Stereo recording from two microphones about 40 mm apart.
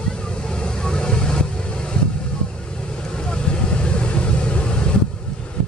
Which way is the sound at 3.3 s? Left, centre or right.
Left.